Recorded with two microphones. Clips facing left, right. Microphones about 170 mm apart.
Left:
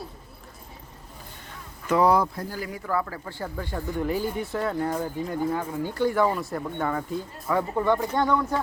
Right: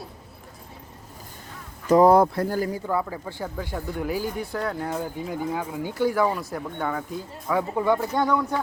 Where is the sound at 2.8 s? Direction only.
15° right (ahead or behind).